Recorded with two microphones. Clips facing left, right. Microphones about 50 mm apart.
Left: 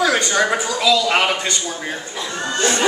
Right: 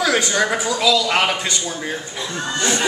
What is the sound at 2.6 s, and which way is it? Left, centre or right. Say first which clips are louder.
Speech: left 2 dB; left.